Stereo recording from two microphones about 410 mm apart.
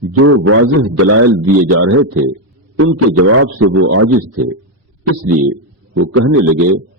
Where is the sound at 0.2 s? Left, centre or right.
Right.